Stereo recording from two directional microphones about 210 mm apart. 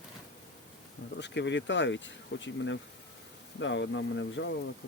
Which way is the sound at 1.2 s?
55° left (ahead or behind).